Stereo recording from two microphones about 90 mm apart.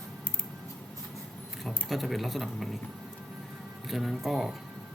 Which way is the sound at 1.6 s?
Centre (ahead or behind).